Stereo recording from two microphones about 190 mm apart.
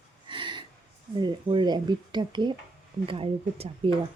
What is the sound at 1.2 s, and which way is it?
Speech, 25° right (ahead or behind).